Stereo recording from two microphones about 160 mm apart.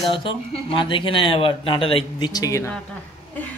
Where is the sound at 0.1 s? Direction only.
35° left (ahead or behind).